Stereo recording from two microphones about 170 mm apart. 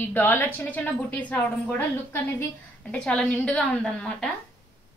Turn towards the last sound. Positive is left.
turn(degrees=5)  # may be behind; listen again after turning